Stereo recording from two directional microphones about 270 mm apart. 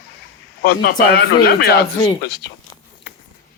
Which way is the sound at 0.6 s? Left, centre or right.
Left.